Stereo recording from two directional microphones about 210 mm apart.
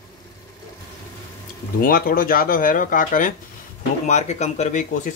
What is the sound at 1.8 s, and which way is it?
Speech, 40° left (ahead or behind).